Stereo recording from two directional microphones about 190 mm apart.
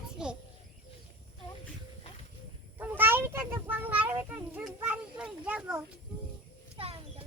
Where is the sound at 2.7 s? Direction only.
10° right (ahead or behind).